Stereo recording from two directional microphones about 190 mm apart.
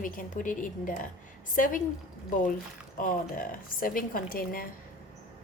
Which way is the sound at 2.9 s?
45° left (ahead or behind).